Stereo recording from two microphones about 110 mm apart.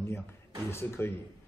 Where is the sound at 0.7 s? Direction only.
25° left (ahead or behind).